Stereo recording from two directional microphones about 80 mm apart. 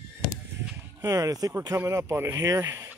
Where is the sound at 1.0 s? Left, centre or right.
Right.